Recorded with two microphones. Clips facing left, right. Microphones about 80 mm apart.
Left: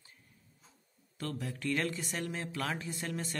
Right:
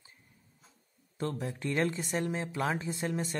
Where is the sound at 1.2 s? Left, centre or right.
Right.